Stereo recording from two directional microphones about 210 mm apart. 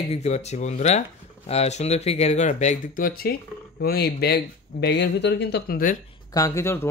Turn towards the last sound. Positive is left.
turn(degrees=10)  # may be behind; listen again after turning